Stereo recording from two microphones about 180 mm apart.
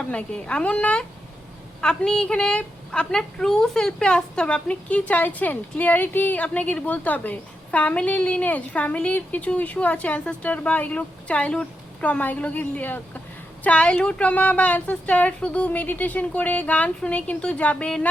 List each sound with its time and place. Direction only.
0.1 s a woman's voice: 5° left (ahead or behind)